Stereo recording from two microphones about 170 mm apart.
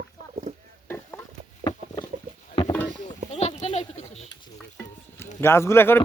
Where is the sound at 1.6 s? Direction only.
25° left (ahead or behind).